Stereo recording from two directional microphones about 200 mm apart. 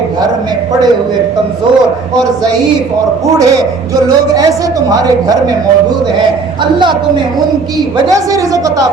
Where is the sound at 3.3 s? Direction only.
15° right (ahead or behind).